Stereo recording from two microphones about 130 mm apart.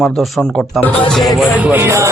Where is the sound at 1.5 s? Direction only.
15° right (ahead or behind).